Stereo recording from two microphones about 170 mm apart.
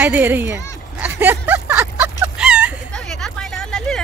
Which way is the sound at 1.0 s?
10° right (ahead or behind).